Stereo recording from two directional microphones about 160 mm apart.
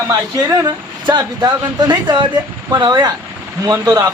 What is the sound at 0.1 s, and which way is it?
Speech, 20° right (ahead or behind).